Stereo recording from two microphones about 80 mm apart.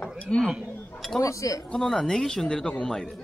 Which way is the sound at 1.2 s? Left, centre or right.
Left.